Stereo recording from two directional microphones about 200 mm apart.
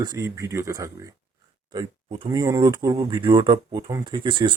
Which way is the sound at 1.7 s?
25° right (ahead or behind).